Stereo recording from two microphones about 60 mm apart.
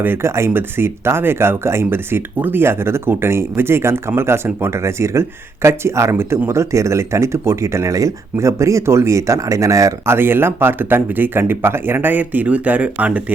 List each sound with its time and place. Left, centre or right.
0.0 s speech: right
0.3 s speech: right
10.1 s speech: right